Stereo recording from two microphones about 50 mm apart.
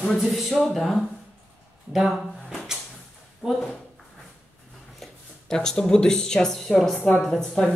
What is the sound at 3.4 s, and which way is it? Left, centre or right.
Speech, centre.